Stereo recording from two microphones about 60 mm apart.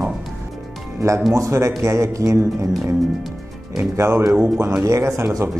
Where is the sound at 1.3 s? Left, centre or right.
Right.